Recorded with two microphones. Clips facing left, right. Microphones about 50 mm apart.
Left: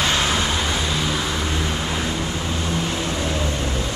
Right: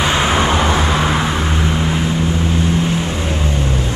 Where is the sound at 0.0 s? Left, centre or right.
Right.